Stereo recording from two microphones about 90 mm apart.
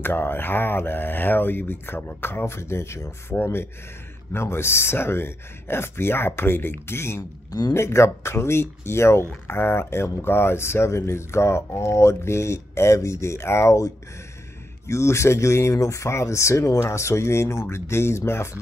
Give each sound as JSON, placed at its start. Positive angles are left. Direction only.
{"t": 0.0, "sound": "speech", "side_deg": 25}